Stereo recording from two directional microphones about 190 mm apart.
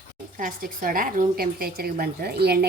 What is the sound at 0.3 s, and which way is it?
A woman's voice, 45° right (ahead or behind).